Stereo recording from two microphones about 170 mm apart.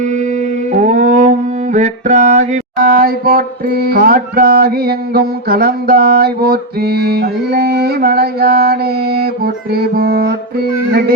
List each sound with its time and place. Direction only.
0.7 s music: 45° right (ahead or behind); by 10.3 s 65° right (ahead or behind)